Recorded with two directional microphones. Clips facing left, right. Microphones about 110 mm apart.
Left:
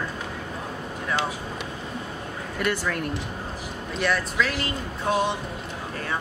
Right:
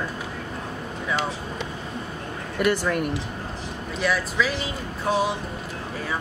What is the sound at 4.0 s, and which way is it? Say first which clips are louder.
Speech: right 1 dB; 5° right (ahead or behind).